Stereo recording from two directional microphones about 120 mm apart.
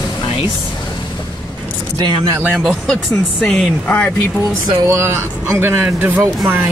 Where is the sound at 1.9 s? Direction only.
35° right (ahead or behind).